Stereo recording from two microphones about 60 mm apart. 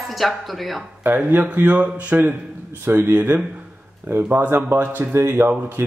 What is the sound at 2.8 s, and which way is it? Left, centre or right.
Speech, right.